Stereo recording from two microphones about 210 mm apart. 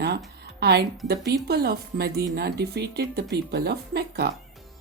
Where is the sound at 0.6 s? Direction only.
50° right (ahead or behind).